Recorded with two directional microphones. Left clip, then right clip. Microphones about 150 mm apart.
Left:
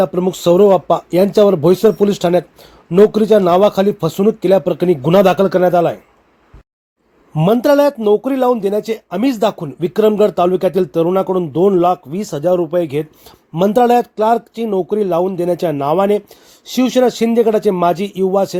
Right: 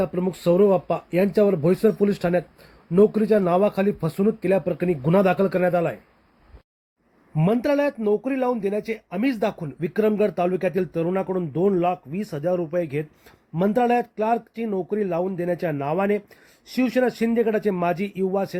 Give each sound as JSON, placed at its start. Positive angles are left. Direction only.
{"t": 0.0, "sound": "speech", "side_deg": 30}
{"t": 7.3, "sound": "speech", "side_deg": 25}
{"t": 12.4, "sound": "speech", "side_deg": 0}
{"t": 13.5, "sound": "speech", "side_deg": 25}